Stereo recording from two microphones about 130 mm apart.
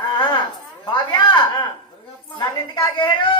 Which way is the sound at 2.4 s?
35° left (ahead or behind).